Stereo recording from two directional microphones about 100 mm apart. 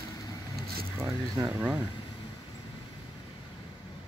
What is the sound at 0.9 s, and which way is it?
Speech, 25° right (ahead or behind).